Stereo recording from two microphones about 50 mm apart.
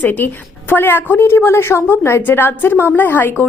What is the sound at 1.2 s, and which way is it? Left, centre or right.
A woman's voice, left.